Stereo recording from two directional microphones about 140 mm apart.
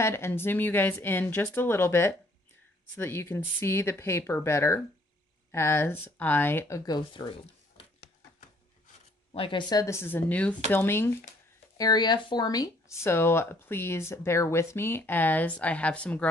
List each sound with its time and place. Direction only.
0.0 s speech: 20° left (ahead or behind)
6.9 s speech: 30° left (ahead or behind)
9.3 s speech: 40° left (ahead or behind); by 11.1 s 15° left (ahead or behind)
11.8 s speech: 30° left (ahead or behind); by 16.3 s 10° left (ahead or behind)